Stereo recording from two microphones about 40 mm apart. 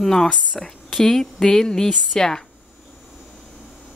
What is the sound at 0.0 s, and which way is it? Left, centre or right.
Speech, centre.